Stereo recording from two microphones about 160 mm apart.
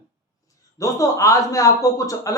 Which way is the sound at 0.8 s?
20° left (ahead or behind).